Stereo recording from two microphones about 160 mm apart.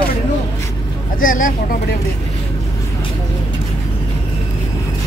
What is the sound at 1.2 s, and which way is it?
Speech, 60° left (ahead or behind).